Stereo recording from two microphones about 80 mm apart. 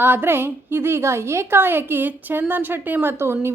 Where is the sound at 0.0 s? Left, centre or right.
Right.